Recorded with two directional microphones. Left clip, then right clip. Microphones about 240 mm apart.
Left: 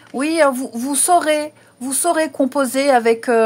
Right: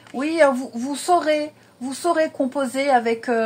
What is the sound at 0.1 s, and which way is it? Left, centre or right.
A woman's voice, left.